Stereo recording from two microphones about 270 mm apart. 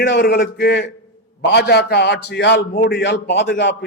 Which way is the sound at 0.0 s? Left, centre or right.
Left.